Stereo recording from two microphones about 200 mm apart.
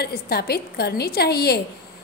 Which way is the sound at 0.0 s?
50° left (ahead or behind).